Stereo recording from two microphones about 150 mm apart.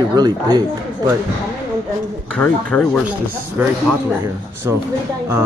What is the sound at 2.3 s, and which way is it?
Speech, 10° left (ahead or behind).